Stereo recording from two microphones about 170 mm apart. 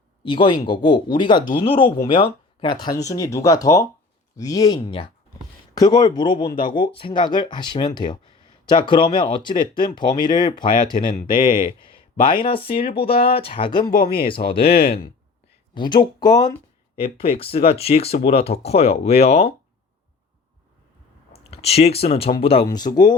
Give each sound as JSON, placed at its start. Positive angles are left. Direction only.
{"t": 0.3, "sound": "speech", "side_deg": 30}
{"t": 12.4, "sound": "speech", "side_deg": 30}
{"t": 14.6, "sound": "speech", "side_deg": 65}
{"t": 15.7, "sound": "speech", "side_deg": 25}
{"t": 17.0, "sound": "speech", "side_deg": 35}
{"t": 21.5, "sound": "speech", "side_deg": 35}